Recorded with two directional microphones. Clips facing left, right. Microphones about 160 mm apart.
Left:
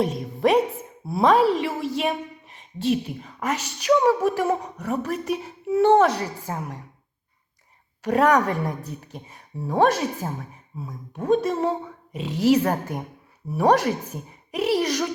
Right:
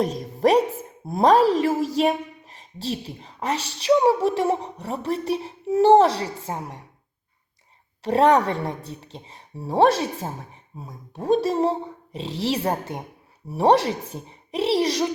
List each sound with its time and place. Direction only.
0.0 s a woman's voice: 40° right (ahead or behind)
8.0 s a woman's voice: 30° right (ahead or behind)